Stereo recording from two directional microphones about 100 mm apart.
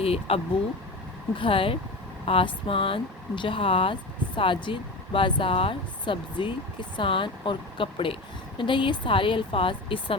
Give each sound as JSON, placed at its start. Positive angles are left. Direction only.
{"t": 0.0, "sound": "speech", "side_deg": 75}
{"t": 1.4, "sound": "speech", "side_deg": 60}